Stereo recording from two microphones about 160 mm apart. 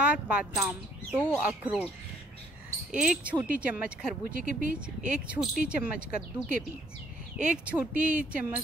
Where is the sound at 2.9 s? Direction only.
5° right (ahead or behind).